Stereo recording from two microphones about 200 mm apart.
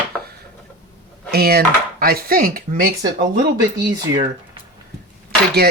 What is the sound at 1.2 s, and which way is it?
Speech, 50° right (ahead or behind).